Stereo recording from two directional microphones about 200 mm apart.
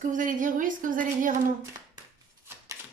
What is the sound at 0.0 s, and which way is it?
A woman's voice, 40° right (ahead or behind).